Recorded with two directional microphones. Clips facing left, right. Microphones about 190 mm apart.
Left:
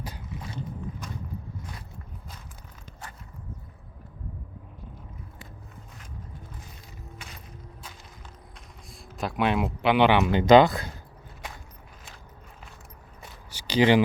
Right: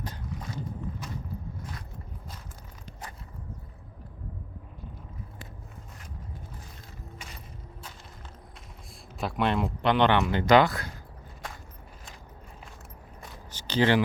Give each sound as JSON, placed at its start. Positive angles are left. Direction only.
{"t": 9.1, "sound": "speech", "side_deg": 0}
{"t": 10.2, "sound": "speech", "side_deg": 20}
{"t": 13.5, "sound": "a sound", "side_deg": 10}